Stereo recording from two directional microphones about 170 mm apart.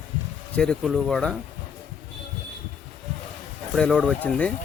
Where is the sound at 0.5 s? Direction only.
5° left (ahead or behind).